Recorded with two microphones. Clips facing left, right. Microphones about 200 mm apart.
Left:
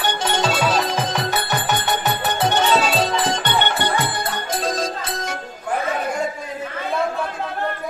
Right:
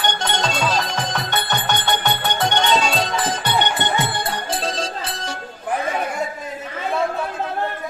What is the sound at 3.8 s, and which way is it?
Music, 25° right (ahead or behind).